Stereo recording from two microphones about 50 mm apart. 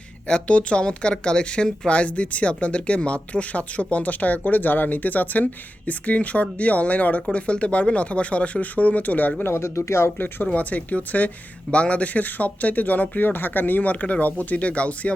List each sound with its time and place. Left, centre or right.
0.3 s speech: left
9.4 s speech: left
10.2 s speech: left
10.5 s speech: left